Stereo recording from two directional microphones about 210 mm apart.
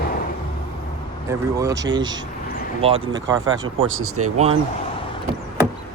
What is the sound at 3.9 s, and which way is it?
Speech, 80° right.